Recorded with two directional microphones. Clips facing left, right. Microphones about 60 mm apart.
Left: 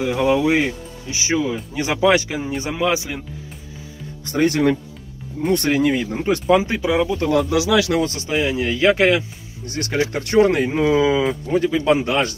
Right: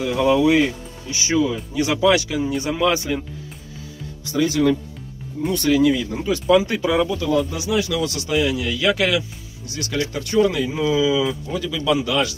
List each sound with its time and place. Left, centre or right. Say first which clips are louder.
0.0 s speech: right 1 dB; left
2.8 s a man's voice: right 1 dB; centre
4.2 s speech: left 1 dB; left
6.4 s a man's voice: right 2 dB; left
7.2 s speech: left 3 dB; left
8.0 s speech: even; left
9.7 s speech: left 3 dB; left